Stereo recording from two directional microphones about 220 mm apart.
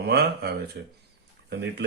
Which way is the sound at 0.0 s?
45° right (ahead or behind).